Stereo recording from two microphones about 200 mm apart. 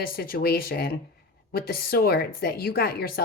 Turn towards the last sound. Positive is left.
turn(degrees=50)  # may be behind; listen again after turning